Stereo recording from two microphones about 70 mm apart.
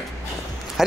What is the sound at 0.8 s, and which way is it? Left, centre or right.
Speech, centre.